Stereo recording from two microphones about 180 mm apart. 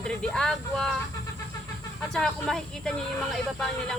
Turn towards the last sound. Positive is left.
turn(degrees=0)  # may be behind; listen again after turning